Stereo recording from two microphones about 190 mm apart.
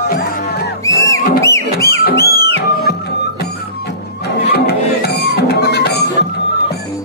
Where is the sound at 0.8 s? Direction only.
15° left (ahead or behind).